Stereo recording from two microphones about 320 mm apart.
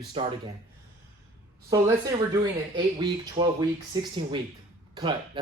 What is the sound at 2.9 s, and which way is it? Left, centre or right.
Speech, centre.